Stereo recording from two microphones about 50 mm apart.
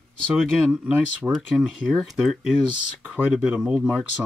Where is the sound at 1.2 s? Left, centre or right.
Centre.